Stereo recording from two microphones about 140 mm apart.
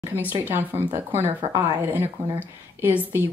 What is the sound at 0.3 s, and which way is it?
Speech, 15° right (ahead or behind).